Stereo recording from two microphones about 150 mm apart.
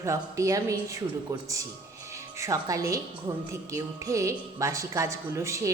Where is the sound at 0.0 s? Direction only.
20° right (ahead or behind).